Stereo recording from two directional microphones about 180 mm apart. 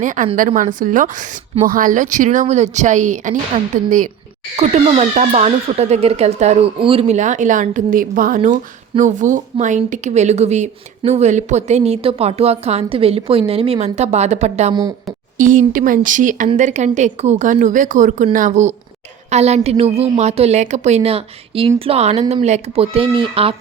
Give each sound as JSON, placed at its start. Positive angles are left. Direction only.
{"t": 0.0, "sound": "a woman's voice", "side_deg": -45}
{"t": 14.7, "sound": "speech", "side_deg": -20}
{"t": 15.4, "sound": "a woman's voice", "side_deg": -45}